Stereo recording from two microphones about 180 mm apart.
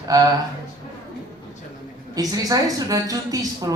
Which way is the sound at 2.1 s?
20° right (ahead or behind).